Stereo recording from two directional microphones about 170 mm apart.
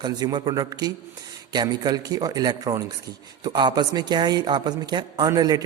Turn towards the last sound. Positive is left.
turn(degrees=-20)  # may be behind; listen again after turning